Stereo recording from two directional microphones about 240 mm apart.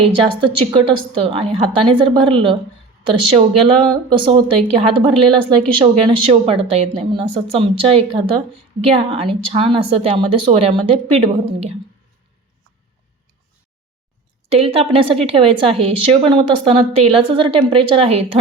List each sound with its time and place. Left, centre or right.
0.0 s a woman's voice: right
14.5 s a woman's voice: right